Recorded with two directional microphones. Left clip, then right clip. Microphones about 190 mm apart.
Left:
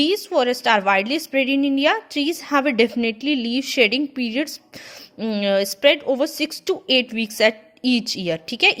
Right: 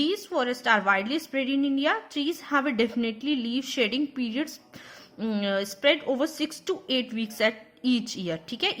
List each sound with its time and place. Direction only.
0.0 s a woman's voice: 25° left (ahead or behind)